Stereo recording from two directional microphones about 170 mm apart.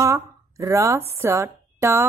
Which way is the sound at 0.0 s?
20° right (ahead or behind).